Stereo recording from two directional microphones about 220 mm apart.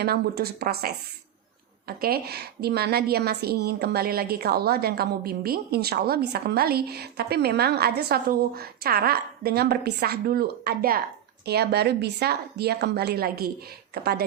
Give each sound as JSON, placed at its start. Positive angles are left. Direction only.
{"t": 0.0, "sound": "a woman's voice", "side_deg": -45}